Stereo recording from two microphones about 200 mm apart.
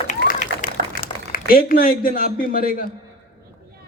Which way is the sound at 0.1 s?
35° left (ahead or behind).